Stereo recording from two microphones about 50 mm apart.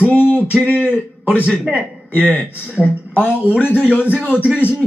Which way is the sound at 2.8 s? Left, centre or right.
Left.